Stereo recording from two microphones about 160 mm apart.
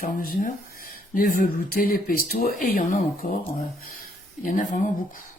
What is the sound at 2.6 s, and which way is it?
Speech, 55° left (ahead or behind).